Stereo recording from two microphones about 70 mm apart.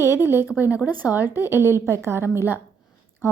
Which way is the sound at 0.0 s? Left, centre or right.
Right.